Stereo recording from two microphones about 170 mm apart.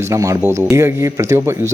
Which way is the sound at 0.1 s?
20° right (ahead or behind).